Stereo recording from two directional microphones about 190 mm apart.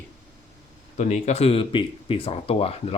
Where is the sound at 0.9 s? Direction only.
40° left (ahead or behind).